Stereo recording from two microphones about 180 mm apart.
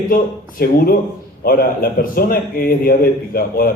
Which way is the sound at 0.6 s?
55° left (ahead or behind).